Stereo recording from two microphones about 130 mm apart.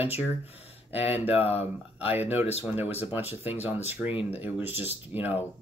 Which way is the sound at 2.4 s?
50° left (ahead or behind).